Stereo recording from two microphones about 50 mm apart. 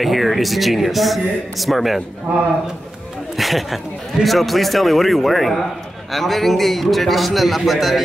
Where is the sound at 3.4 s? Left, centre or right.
Centre.